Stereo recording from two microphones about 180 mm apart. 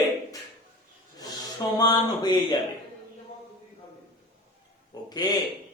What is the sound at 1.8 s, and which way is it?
Speech, 20° left (ahead or behind).